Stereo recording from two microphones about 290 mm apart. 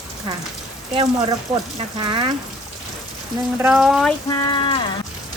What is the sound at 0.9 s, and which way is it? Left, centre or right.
Speech, centre.